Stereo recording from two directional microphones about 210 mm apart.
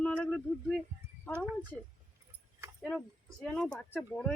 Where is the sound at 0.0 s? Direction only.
5° left (ahead or behind).